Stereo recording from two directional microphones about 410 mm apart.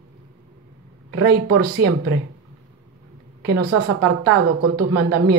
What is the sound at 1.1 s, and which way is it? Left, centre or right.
A woman's voice, right.